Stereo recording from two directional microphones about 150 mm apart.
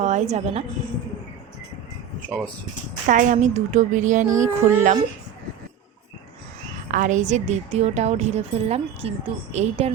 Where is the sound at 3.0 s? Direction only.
55° right (ahead or behind).